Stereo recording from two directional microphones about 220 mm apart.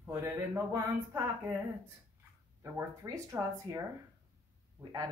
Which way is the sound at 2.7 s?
15° right (ahead or behind).